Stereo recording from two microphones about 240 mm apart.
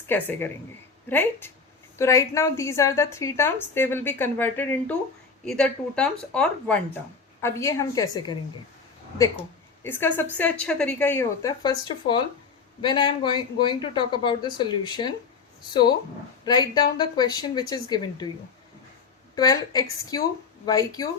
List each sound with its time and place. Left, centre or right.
0.1 s a woman's voice: centre
9.8 s a woman's voice: centre
19.4 s a woman's voice: centre